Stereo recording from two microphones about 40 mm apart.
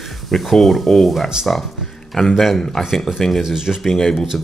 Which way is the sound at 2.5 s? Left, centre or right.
Centre.